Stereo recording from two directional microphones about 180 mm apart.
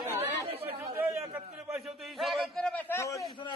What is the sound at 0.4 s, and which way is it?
Chatter, 30° right (ahead or behind).